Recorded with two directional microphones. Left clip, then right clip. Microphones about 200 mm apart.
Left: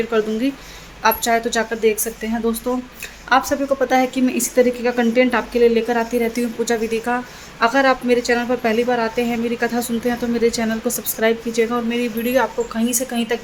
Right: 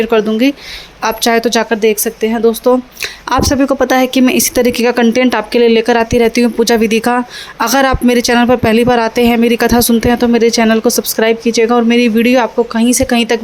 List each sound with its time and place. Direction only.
0.0 s speech: 45° right (ahead or behind)